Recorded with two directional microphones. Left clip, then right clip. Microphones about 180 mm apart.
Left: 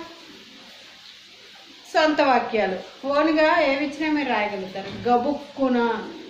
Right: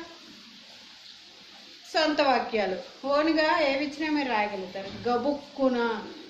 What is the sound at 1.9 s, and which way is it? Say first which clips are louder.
A woman's voice: left 5 dB; 10° right (ahead or behind).